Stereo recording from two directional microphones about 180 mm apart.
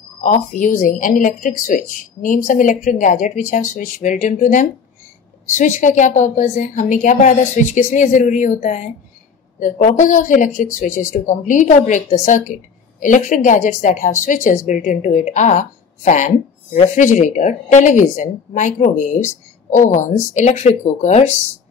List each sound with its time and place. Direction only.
0.2 s a woman's voice: 45° left (ahead or behind)